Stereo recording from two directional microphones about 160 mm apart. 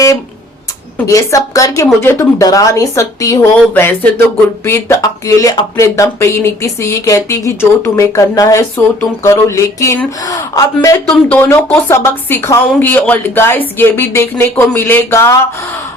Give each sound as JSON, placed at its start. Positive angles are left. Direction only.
{"t": 0.9, "sound": "speech", "side_deg": 20}